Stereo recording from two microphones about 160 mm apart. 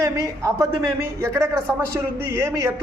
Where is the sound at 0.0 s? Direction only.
20° right (ahead or behind).